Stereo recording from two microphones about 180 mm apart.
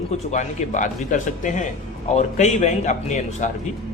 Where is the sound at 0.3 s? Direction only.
40° left (ahead or behind).